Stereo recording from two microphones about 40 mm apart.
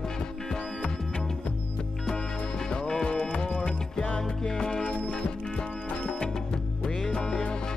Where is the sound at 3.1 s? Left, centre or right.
Left.